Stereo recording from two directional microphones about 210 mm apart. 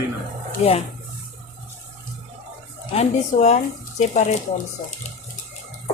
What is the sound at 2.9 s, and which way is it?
Speech, 30° left (ahead or behind).